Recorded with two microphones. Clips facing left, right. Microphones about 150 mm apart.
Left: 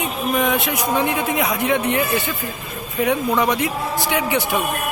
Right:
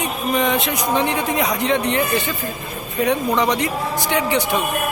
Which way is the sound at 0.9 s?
10° left (ahead or behind).